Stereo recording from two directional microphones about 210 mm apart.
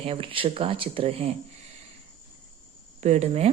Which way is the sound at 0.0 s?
25° right (ahead or behind).